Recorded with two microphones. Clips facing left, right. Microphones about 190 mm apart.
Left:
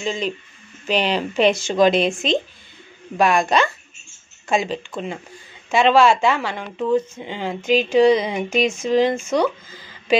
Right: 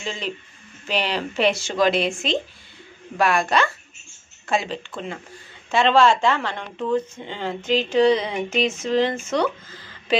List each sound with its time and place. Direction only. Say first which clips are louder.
0.0 s a woman's voice: left 5 dB; 15° left (ahead or behind)